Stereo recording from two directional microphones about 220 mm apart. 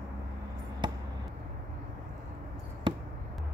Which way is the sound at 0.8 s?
20° right (ahead or behind).